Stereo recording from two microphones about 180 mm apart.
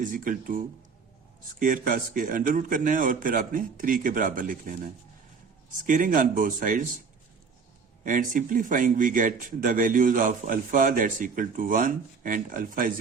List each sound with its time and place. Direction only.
0.0 s speech: 50° right (ahead or behind)
8.0 s speech: 45° right (ahead or behind)